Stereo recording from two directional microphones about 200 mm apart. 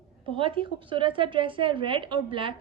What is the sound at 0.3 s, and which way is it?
A woman's voice, 25° right (ahead or behind).